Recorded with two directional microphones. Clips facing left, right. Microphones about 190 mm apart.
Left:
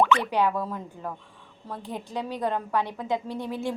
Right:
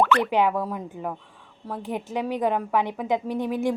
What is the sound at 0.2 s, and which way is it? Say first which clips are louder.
A woman's voice: right 3 dB; 15° right (ahead or behind).